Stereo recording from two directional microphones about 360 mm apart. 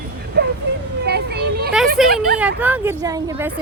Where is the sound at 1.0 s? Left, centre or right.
Right.